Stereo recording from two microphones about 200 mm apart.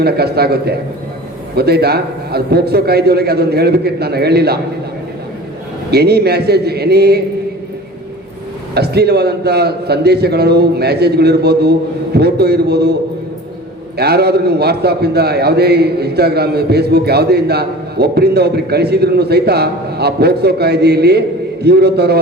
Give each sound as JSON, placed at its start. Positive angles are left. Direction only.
{"t": 0.0, "sound": "a man's voice", "side_deg": -55}
{"t": 5.9, "sound": "a man's voice", "side_deg": -55}
{"t": 8.7, "sound": "a man's voice", "side_deg": -55}